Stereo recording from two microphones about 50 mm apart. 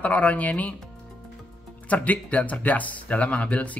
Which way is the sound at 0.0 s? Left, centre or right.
Left.